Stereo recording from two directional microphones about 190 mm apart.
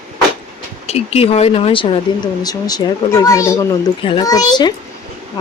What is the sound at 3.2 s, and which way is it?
Speech, 15° left (ahead or behind).